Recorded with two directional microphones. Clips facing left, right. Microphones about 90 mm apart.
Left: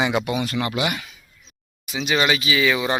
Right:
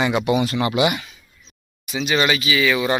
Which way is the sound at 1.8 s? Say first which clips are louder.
Right 1 dB; 15° left (ahead or behind).